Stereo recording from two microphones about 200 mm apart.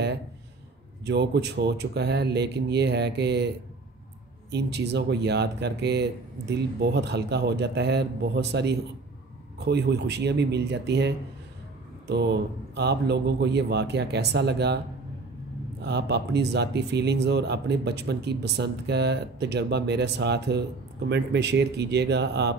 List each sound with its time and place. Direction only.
1.0 s speech: 55° right (ahead or behind)
4.5 s speech: 55° right (ahead or behind)
15.8 s speech: 55° right (ahead or behind)